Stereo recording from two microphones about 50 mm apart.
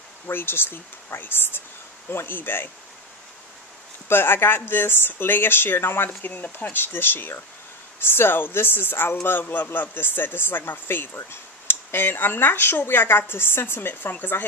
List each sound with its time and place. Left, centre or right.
0.3 s speech: left
4.1 s speech: left
6.0 s speech: left